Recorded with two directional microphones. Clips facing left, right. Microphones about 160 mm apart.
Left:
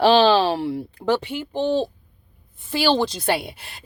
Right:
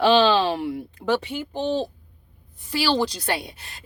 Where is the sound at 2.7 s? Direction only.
25° left (ahead or behind).